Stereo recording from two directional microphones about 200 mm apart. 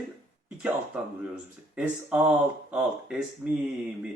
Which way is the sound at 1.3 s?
5° right (ahead or behind).